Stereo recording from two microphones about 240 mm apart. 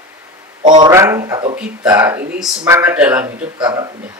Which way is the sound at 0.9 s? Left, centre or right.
Centre.